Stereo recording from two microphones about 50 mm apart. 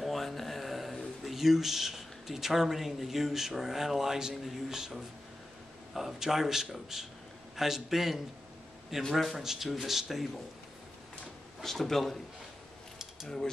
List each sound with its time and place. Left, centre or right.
0.0 s a man's voice: centre
11.6 s speech: centre